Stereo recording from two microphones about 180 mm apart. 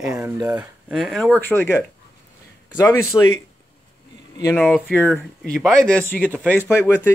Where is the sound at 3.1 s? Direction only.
15° left (ahead or behind).